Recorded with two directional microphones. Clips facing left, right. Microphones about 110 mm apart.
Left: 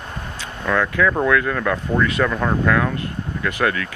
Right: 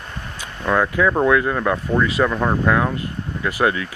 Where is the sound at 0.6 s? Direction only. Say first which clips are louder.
Right 1 dB; 20° right (ahead or behind).